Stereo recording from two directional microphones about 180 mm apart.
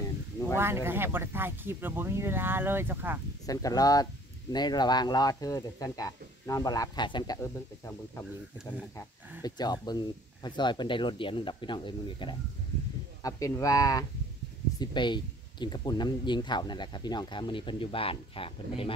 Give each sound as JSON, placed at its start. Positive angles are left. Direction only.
{"t": 0.6, "sound": "speech", "side_deg": -15}
{"t": 3.4, "sound": "speech", "side_deg": 20}
{"t": 9.4, "sound": "speech", "side_deg": 20}